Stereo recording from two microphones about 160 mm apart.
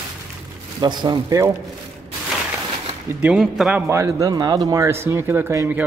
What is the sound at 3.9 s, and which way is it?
Speech, 20° right (ahead or behind).